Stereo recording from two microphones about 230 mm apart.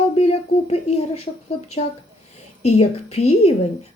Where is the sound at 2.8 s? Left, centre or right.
Left.